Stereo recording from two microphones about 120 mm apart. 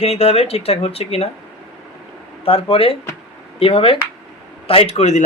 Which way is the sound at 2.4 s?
50° left (ahead or behind).